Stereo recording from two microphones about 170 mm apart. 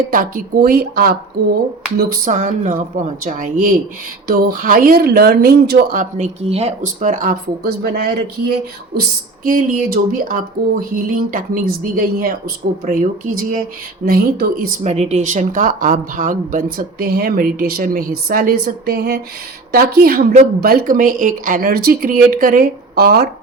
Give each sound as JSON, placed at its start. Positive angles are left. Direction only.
{"t": 0.1, "sound": "speech", "side_deg": -55}
{"t": 14.8, "sound": "speech", "side_deg": -40}